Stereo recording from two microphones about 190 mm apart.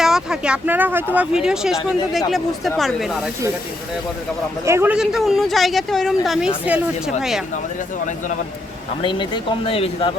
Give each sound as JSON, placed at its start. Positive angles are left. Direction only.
{"t": 0.0, "sound": "speech", "side_deg": -5}
{"t": 4.6, "sound": "speech", "side_deg": -10}
{"t": 9.0, "sound": "speech", "side_deg": 25}